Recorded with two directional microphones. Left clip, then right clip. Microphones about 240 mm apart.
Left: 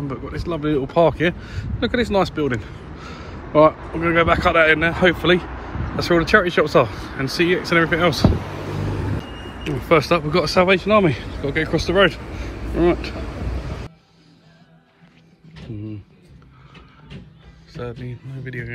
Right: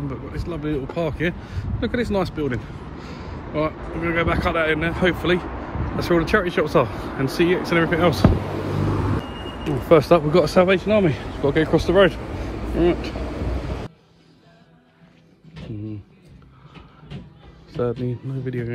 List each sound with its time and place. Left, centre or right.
0.1 s a man's voice: centre
5.5 s a sound: right
5.9 s speech: centre
8.3 s vehicle: right
9.6 s speech: centre
13.1 s vehicle: right
17.7 s speech: right